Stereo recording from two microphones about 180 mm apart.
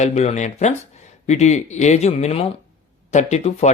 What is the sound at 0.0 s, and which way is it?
Speech, 40° left (ahead or behind).